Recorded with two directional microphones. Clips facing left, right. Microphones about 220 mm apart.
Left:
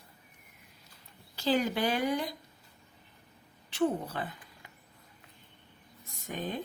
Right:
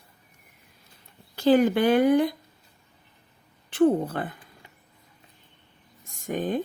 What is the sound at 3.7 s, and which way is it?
Speech, 55° right (ahead or behind).